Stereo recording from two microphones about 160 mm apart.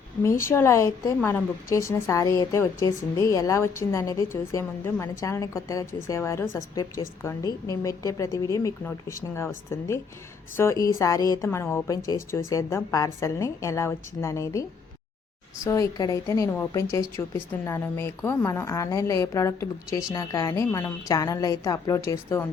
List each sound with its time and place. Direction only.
0.2 s a woman's voice: 15° left (ahead or behind)
15.6 s a woman's voice: 20° left (ahead or behind)